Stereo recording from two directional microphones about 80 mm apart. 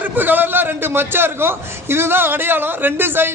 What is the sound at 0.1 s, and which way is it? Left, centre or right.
A man's voice, right.